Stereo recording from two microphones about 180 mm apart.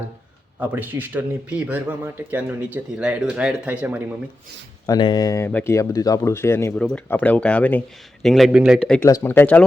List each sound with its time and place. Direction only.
0.6 s a man's voice: 10° right (ahead or behind)
4.9 s speech: 25° left (ahead or behind); by 9.0 s centre (ahead or behind)
9.0 s speech: 15° left (ahead or behind)